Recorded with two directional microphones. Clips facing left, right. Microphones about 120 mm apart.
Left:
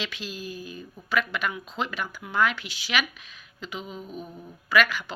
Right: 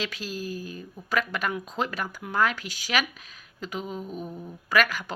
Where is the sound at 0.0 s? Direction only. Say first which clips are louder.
Right 2 dB; 40° right (ahead or behind).